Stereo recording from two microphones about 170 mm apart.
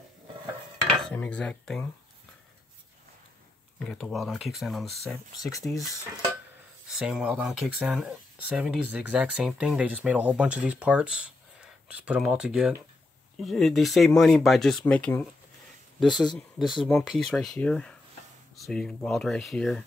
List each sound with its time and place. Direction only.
0.8 s cutlery: 5° left (ahead or behind)
3.8 s speech: centre (ahead or behind)
16.1 s speech: 25° left (ahead or behind)
16.3 s speech: centre (ahead or behind)